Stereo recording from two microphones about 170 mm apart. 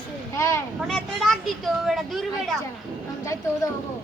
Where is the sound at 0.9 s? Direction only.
Centre (ahead or behind).